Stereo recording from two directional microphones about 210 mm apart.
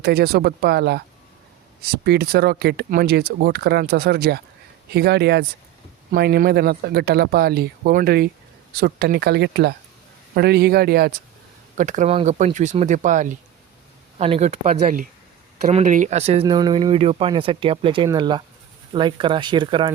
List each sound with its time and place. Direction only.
0.0 s speech: 50° right (ahead or behind)
11.8 s speech: 35° right (ahead or behind)